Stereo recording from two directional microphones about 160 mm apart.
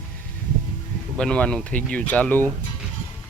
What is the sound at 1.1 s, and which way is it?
Speech, 5° left (ahead or behind).